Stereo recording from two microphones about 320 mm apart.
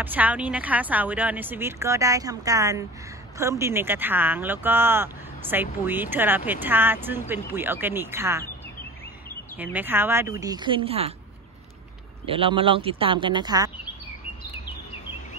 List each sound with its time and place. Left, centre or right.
0.0 s speech: centre
9.6 s speech: centre
12.3 s speech: centre